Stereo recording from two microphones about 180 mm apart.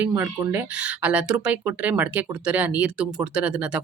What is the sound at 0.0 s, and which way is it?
Speech, 10° right (ahead or behind).